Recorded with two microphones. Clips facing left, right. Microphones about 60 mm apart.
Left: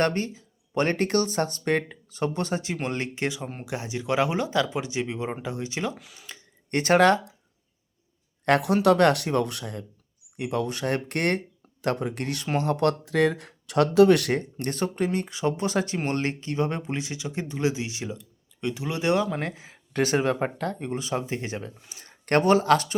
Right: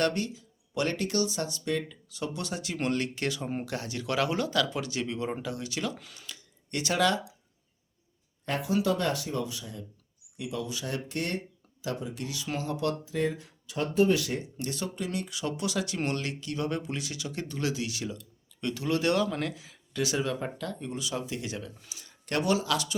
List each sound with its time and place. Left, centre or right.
0.0 s speech: left
6.0 s speech: centre
6.2 s speech: left
8.4 s speech: left
10.3 s speech: left